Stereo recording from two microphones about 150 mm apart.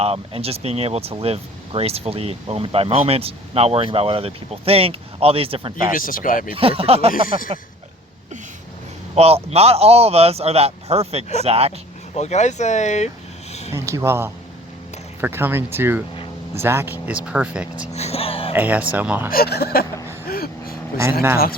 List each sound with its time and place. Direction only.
0.0 s speech: 40° right (ahead or behind)
5.9 s speech: 65° left (ahead or behind)
6.5 s speech: 40° right (ahead or behind)
7.3 s speech: 65° left (ahead or behind)
9.1 s a man's voice: 45° right (ahead or behind)
12.1 s speech: 45° left (ahead or behind)
13.5 s a sound: 45° left (ahead or behind)
13.7 s speech: 20° right (ahead or behind)
17.9 s speech: 45° left (ahead or behind)
18.5 s speech: 10° right (ahead or behind)
19.3 s speech: 90° left
20.2 s vehicle: 90° left